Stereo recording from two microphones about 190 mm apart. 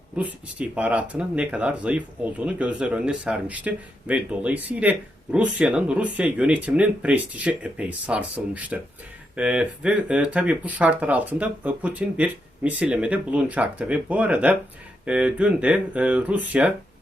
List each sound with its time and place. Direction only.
0.2 s speech: 5° right (ahead or behind)